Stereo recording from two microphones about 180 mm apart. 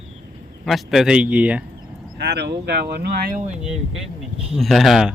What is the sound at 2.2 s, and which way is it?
Speech, 65° right (ahead or behind).